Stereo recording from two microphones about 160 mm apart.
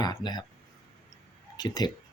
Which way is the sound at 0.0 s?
25° left (ahead or behind).